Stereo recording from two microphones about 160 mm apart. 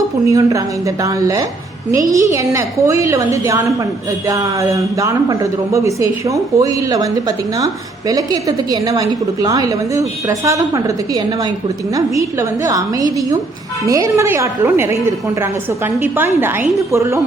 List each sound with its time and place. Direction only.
0.3 s a woman's voice: 20° right (ahead or behind)